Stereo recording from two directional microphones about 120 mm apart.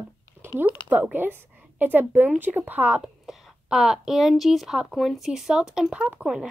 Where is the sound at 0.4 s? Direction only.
15° right (ahead or behind).